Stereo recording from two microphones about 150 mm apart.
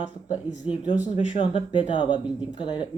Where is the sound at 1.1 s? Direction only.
50° left (ahead or behind).